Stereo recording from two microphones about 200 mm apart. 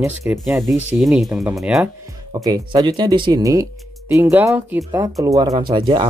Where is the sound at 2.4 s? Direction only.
20° right (ahead or behind).